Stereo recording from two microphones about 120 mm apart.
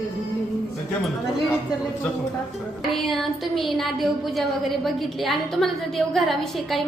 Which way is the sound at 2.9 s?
Centre (ahead or behind).